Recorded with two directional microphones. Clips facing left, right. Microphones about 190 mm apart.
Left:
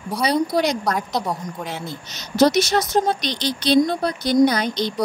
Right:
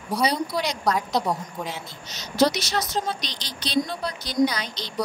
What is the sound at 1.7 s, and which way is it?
Speech, 50° left (ahead or behind).